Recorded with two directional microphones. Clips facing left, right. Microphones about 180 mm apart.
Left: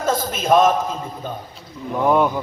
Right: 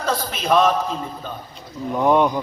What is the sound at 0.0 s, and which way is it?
Speech, 45° left (ahead or behind).